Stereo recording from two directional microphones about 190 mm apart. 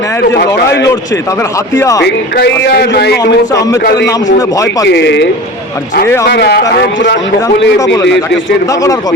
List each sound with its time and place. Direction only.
0.3 s a man's voice: 60° left (ahead or behind)
1.7 s speech: 15° left (ahead or behind)
2.0 s a man's voice: 65° left (ahead or behind)
3.5 s speech: 15° left (ahead or behind)
4.9 s a man's voice: 65° left (ahead or behind)
6.2 s a man's voice: 60° left (ahead or behind)
8.7 s speech: 15° left (ahead or behind)